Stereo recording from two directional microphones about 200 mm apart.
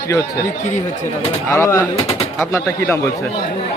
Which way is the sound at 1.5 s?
15° left (ahead or behind).